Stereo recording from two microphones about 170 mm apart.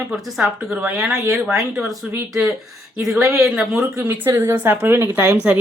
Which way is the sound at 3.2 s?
20° right (ahead or behind).